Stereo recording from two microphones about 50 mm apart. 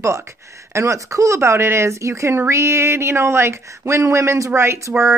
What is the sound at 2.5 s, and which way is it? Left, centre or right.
Speech, right.